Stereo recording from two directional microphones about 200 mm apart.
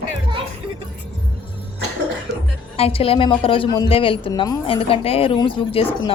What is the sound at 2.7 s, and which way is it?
A woman's voice, 30° left (ahead or behind).